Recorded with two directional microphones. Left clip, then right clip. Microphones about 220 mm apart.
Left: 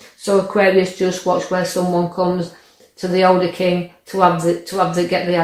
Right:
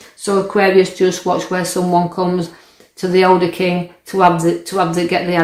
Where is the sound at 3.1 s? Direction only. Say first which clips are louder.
Right 2 dB; 40° right (ahead or behind).